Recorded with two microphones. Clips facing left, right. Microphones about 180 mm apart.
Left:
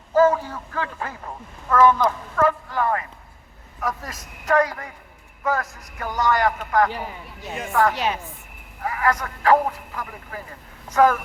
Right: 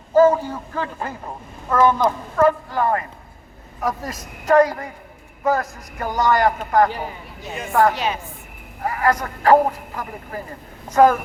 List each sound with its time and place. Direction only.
0.1 s a man's voice: 25° right (ahead or behind)
7.4 s speech: centre (ahead or behind)
7.7 s a man's voice: 40° right (ahead or behind)